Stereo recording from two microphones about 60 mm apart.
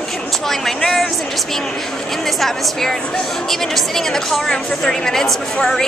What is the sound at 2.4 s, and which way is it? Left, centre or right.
A woman's voice, centre.